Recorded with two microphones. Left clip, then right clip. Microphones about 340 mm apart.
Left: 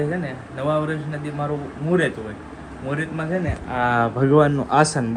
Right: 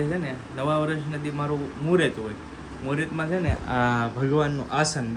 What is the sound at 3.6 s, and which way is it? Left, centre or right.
Speech, right.